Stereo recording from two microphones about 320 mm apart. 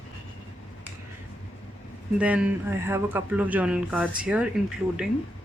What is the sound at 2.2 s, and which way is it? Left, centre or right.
Speech, centre.